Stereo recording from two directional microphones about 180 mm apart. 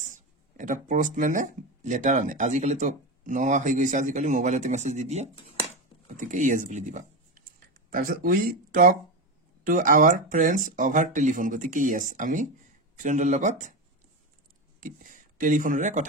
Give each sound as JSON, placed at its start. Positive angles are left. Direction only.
{"t": 0.0, "sound": "speech", "side_deg": -45}
{"t": 14.8, "sound": "speech", "side_deg": -50}